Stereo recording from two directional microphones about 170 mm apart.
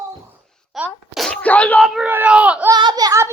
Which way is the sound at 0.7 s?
Centre (ahead or behind).